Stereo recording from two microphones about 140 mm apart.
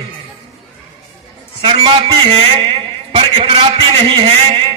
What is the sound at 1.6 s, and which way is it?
Speech, 35° right (ahead or behind).